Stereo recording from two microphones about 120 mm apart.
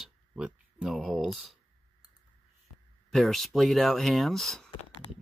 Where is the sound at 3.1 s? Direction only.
Centre (ahead or behind).